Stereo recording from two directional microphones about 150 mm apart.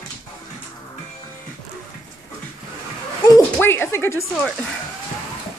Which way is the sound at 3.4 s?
15° left (ahead or behind).